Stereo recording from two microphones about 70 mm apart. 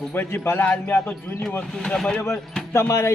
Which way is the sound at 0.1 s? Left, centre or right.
Left.